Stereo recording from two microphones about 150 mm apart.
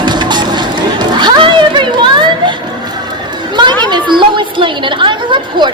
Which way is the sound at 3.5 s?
30° right (ahead or behind).